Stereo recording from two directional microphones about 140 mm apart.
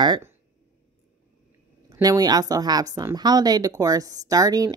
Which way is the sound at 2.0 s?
25° right (ahead or behind).